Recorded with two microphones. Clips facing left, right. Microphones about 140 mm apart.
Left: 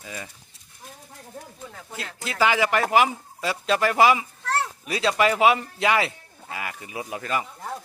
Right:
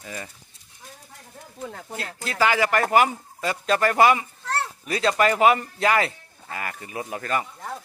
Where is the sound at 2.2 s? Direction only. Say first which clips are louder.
Even; 10° left (ahead or behind).